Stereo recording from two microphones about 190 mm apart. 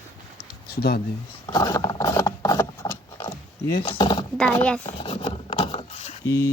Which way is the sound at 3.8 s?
25° left (ahead or behind).